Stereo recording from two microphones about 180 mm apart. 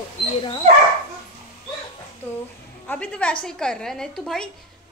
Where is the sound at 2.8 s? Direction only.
10° left (ahead or behind).